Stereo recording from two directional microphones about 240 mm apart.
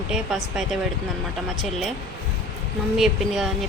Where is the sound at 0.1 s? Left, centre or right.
Centre.